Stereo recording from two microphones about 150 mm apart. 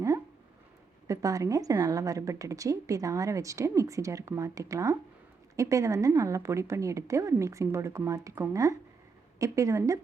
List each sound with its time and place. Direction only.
1.0 s a woman's voice: 20° right (ahead or behind)